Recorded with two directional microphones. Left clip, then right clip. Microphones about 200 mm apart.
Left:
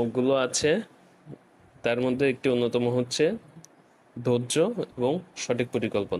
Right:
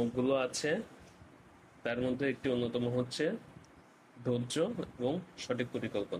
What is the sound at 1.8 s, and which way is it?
Speech, 40° left (ahead or behind).